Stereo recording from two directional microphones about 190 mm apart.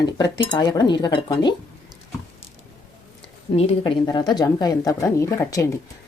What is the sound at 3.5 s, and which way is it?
Speech, 30° left (ahead or behind).